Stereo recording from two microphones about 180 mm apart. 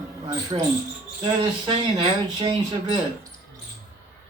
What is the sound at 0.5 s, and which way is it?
Speech, 25° right (ahead or behind).